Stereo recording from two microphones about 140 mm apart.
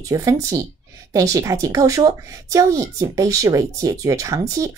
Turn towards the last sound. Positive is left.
turn(degrees=-25)  # may be behind; listen again after turning